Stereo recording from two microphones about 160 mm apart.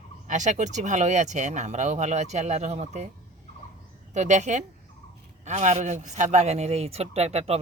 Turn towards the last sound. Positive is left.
turn(degrees=-40)  # may be behind; listen again after turning